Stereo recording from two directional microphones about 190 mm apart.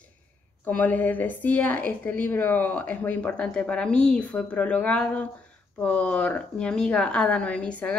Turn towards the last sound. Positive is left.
turn(degrees=5)  # may be behind; listen again after turning